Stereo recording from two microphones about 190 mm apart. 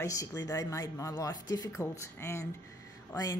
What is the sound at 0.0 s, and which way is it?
Speech, 15° left (ahead or behind).